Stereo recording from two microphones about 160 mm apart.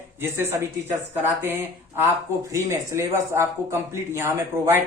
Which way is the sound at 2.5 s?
15° right (ahead or behind).